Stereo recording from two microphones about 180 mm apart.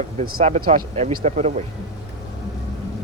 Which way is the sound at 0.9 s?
40° right (ahead or behind).